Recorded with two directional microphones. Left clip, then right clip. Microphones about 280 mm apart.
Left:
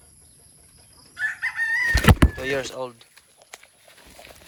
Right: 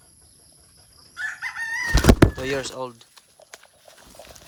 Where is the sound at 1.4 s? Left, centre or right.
Right.